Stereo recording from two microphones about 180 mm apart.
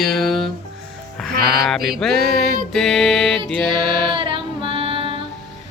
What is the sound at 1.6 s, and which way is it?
Mantra, centre (ahead or behind).